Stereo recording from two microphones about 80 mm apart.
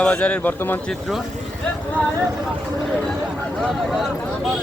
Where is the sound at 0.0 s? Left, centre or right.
Centre.